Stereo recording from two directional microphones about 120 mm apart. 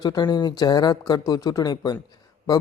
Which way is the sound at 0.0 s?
35° left (ahead or behind).